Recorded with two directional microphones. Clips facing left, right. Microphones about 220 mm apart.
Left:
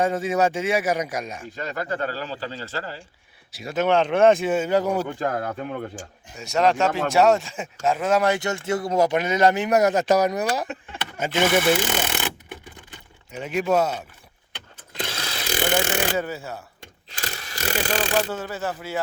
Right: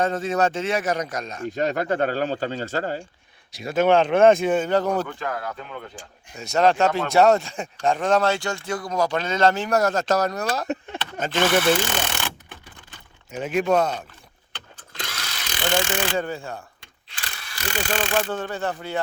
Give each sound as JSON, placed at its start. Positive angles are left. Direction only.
{"t": 0.0, "sound": "speech", "side_deg": 10}
{"t": 1.5, "sound": "speech", "side_deg": -45}
{"t": 3.7, "sound": "speech", "side_deg": -50}
{"t": 4.4, "sound": "speech", "side_deg": 5}
{"t": 5.2, "sound": "speech", "side_deg": 45}
{"t": 6.3, "sound": "speech", "side_deg": 0}
{"t": 14.9, "sound": "mechanisms", "side_deg": 30}
{"t": 16.1, "sound": "speech", "side_deg": 5}
{"t": 16.8, "sound": "a sound", "side_deg": 40}
{"t": 18.3, "sound": "speech", "side_deg": 5}